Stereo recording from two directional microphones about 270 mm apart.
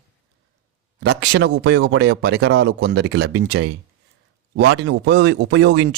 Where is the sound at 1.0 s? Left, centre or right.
Right.